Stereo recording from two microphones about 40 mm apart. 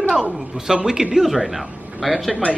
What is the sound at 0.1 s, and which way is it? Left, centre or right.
A man's voice, centre.